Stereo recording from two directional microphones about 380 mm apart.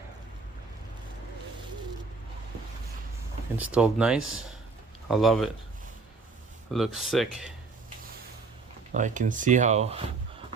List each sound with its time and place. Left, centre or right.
3.6 s speech: centre
6.7 s speech: centre
8.9 s speech: centre